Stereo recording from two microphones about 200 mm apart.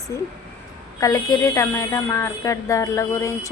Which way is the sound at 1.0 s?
20° left (ahead or behind).